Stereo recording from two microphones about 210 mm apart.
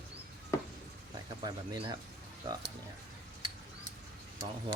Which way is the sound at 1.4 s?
20° right (ahead or behind).